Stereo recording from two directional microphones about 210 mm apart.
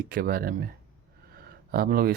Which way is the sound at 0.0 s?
45° right (ahead or behind).